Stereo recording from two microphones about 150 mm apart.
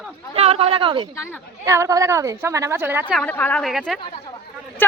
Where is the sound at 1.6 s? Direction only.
20° right (ahead or behind).